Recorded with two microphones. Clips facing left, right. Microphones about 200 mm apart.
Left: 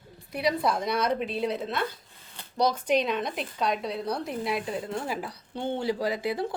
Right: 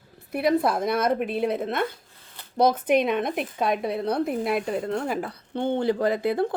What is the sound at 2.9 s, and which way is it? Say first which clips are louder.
A woman's voice: right 4 dB; 55° right (ahead or behind).